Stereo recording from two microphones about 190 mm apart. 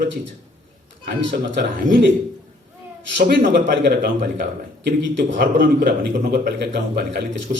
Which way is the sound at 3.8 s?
55° right (ahead or behind).